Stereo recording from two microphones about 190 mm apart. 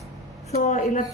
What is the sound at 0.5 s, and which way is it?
Speech, 40° left (ahead or behind).